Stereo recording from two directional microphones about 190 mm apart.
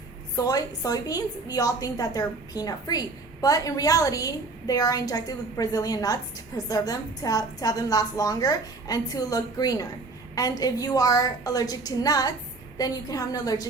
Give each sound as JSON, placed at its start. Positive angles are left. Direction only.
{"t": 0.3, "sound": "a woman's voice", "side_deg": 20}